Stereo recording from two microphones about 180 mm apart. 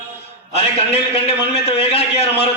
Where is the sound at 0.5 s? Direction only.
35° left (ahead or behind).